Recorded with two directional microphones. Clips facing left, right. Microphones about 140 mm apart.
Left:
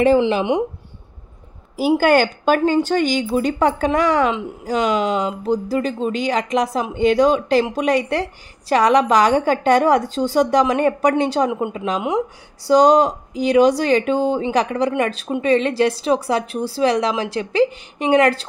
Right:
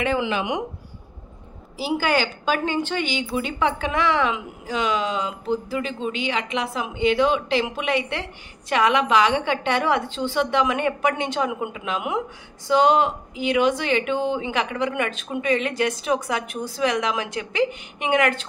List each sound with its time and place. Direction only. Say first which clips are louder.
0.3 s speech: left 6 dB; 35° left (ahead or behind)
1.8 s speech: left 8 dB; 50° left (ahead or behind); by 18.5 s 35° left (ahead or behind)